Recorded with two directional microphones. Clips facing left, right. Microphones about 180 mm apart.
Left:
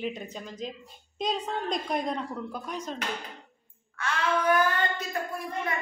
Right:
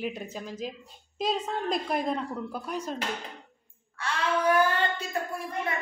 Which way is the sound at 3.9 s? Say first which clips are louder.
Even; 30° right (ahead or behind).